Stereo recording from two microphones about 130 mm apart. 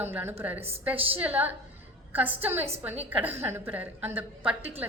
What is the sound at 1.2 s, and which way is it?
A man's voice, 10° right (ahead or behind).